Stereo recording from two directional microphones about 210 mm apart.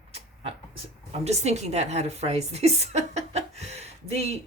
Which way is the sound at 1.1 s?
30° right (ahead or behind).